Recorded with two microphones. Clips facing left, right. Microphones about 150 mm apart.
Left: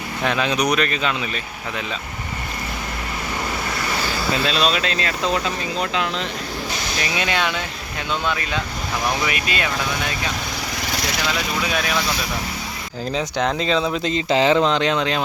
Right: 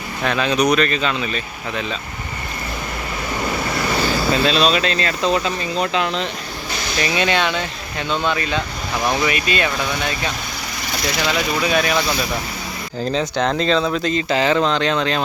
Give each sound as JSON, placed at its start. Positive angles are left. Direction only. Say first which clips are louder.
{"t": 0.2, "sound": "speech", "louder": "right 2 dB", "side_deg": 15}
{"t": 4.4, "sound": "speech", "louder": "right 3 dB", "side_deg": 5}
{"t": 11.6, "sound": "speech", "louder": "right 5 dB", "side_deg": 0}
{"t": 13.1, "sound": "speech", "louder": "right 2 dB", "side_deg": 10}